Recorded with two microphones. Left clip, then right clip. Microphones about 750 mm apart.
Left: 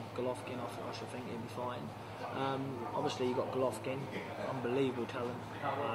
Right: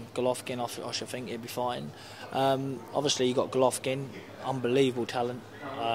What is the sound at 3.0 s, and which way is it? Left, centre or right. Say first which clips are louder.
Speech: right 9 dB; right.